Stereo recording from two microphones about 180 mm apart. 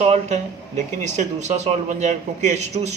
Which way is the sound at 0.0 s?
35° right (ahead or behind).